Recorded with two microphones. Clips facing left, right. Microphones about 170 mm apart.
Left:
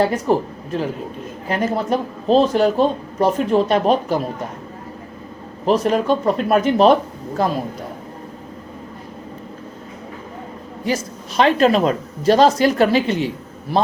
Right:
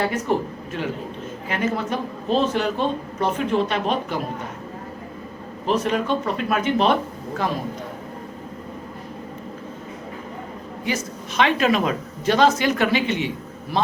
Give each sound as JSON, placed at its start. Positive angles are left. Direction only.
{"t": 0.3, "sound": "speech", "side_deg": 35}
{"t": 5.6, "sound": "speech", "side_deg": 35}
{"t": 10.8, "sound": "speech", "side_deg": 35}